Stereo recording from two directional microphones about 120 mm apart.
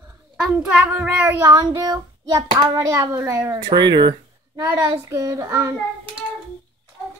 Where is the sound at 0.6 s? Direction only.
10° right (ahead or behind).